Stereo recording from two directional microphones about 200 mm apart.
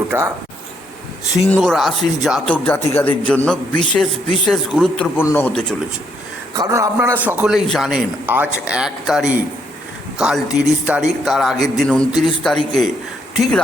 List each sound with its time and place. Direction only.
0.1 s a man's voice: 10° right (ahead or behind)
1.5 s a man's voice: 5° left (ahead or behind)
6.5 s a man's voice: 15° right (ahead or behind); by 13.6 s centre (ahead or behind)